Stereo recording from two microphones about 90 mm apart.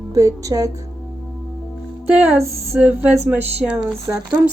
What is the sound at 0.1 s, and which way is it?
Speech, 40° right (ahead or behind).